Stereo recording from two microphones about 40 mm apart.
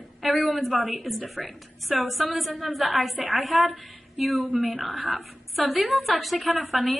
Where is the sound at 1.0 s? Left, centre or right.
Centre.